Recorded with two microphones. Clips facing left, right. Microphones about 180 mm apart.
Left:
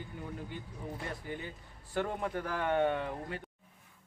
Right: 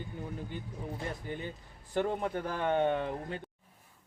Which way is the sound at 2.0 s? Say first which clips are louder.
Right 3 dB; 25° right (ahead or behind).